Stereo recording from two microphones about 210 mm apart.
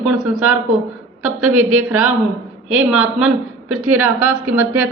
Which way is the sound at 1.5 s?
90° right.